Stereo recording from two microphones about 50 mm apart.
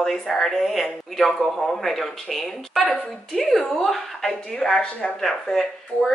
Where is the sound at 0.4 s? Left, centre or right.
Centre.